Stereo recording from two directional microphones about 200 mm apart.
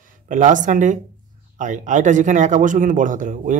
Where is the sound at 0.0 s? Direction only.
40° right (ahead or behind).